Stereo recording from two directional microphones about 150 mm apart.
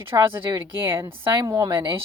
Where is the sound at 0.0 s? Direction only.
15° right (ahead or behind).